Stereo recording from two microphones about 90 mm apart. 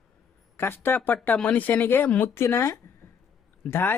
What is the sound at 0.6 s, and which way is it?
Speech, 25° left (ahead or behind).